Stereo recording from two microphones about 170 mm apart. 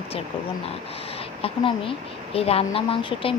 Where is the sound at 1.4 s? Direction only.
30° left (ahead or behind).